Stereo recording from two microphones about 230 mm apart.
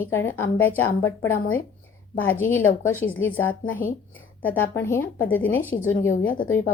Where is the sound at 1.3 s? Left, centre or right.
Left.